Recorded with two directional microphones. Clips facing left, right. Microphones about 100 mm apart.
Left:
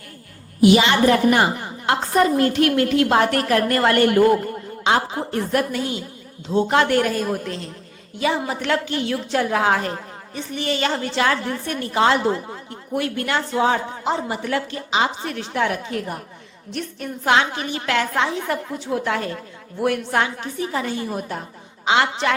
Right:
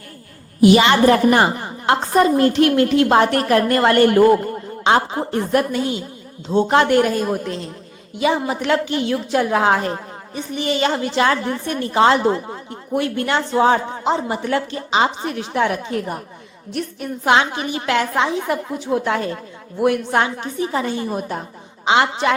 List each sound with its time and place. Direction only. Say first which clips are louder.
0.6 s a woman's voice: right 3 dB; 55° right (ahead or behind)
1.0 s a woman's voice: right 3 dB; 40° right (ahead or behind)
1.9 s a woman's voice: right 3 dB; 25° right (ahead or behind)
5.3 s a woman's voice: right 3 dB; 25° right (ahead or behind)
13.6 s a woman's voice: right 5 dB; 35° right (ahead or behind)
15.2 s a woman's voice: right 3 dB; 20° right (ahead or behind)
17.2 s a woman's voice: right 2 dB; 20° right (ahead or behind)